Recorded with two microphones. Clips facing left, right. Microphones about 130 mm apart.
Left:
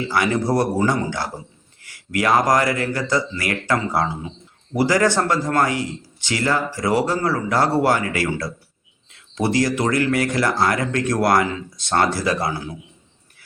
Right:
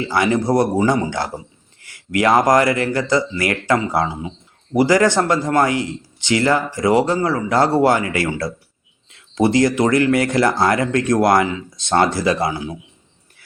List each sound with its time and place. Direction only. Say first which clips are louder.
0.1 s speech: right 3 dB; 25° right (ahead or behind)